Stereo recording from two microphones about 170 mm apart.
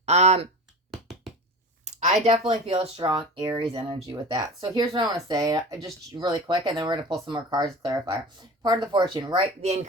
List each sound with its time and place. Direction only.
0.0 s speech: 40° right (ahead or behind)
1.8 s a sound: 45° right (ahead or behind)
2.5 s speech: 35° right (ahead or behind)
9.6 s speech: 40° right (ahead or behind)